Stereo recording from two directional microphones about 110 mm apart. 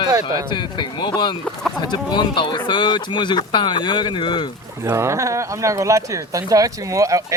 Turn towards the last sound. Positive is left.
turn(degrees=-30)  # may be behind; listen again after turning